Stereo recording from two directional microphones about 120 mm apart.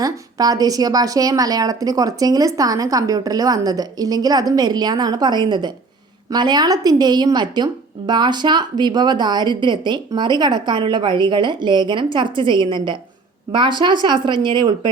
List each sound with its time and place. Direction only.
0.0 s a woman's voice: 30° right (ahead or behind)